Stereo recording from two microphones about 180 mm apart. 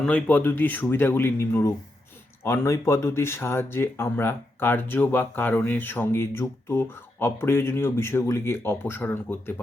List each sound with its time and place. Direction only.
0.0 s speech: 5° left (ahead or behind)